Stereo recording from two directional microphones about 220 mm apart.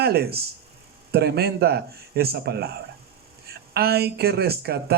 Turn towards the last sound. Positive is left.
turn(degrees=-45)  # may be behind; listen again after turning